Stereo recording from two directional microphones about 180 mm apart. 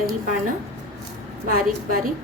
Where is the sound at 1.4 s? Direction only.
55° right (ahead or behind).